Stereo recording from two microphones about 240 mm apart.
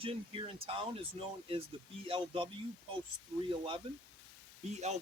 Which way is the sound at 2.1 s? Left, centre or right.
Right.